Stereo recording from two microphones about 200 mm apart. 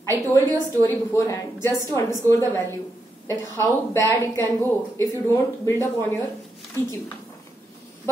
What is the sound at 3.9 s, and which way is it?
Speech, 15° left (ahead or behind).